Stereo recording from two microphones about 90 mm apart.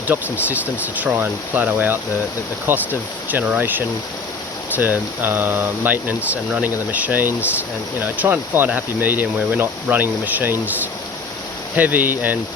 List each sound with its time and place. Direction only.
0.1 s speech: 20° right (ahead or behind)
11.8 s speech: 20° right (ahead or behind)